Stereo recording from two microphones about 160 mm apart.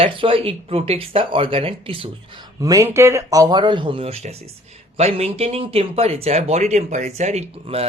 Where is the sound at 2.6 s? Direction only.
20° right (ahead or behind).